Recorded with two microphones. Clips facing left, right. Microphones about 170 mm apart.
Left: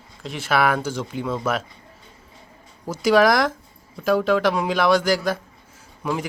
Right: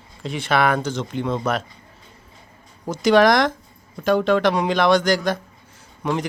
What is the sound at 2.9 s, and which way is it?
Speech, 5° left (ahead or behind).